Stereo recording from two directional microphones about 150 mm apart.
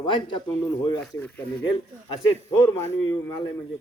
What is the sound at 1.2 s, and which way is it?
Speech, 10° left (ahead or behind).